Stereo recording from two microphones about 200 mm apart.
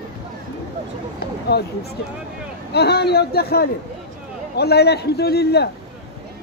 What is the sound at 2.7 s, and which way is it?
A man's voice, 55° left (ahead or behind).